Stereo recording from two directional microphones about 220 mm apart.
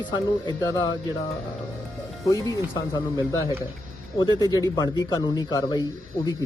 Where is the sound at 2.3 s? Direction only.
15° left (ahead or behind).